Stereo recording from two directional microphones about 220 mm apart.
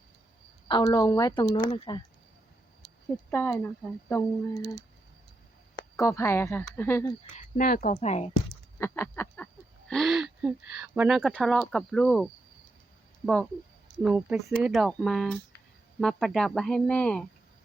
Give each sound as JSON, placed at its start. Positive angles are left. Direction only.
{"t": 0.7, "sound": "speech", "side_deg": 20}
{"t": 3.2, "sound": "speech", "side_deg": 10}
{"t": 6.0, "sound": "speech", "side_deg": 15}
{"t": 7.3, "sound": "speech", "side_deg": 40}
{"t": 8.8, "sound": "speech", "side_deg": 10}